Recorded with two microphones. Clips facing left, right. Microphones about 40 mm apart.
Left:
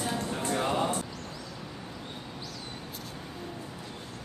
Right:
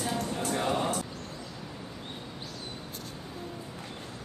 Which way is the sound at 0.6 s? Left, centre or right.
Centre.